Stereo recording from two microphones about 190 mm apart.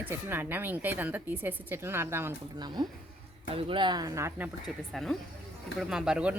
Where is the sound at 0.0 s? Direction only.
10° right (ahead or behind).